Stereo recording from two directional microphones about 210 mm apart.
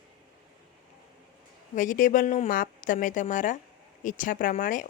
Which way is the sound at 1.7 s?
40° left (ahead or behind).